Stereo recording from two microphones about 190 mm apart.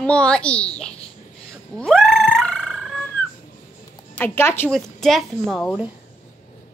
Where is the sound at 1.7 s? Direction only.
Centre (ahead or behind).